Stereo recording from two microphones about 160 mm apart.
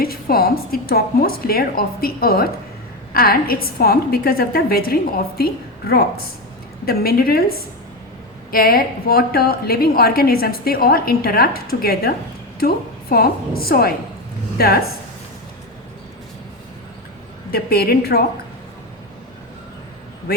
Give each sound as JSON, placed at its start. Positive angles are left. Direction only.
{"t": 0.0, "sound": "a woman's voice", "side_deg": 70}
{"t": 6.8, "sound": "a woman's voice", "side_deg": 70}
{"t": 17.5, "sound": "a woman's voice", "side_deg": 75}